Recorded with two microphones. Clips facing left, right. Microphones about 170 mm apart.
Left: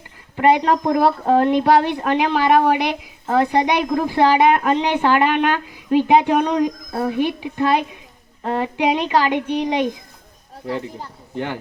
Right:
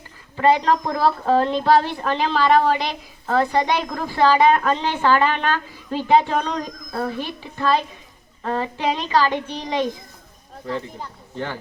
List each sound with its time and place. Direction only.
0.4 s a woman's voice: 20° left (ahead or behind)